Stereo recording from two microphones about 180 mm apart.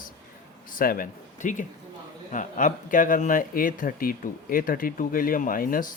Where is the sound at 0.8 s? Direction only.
50° left (ahead or behind).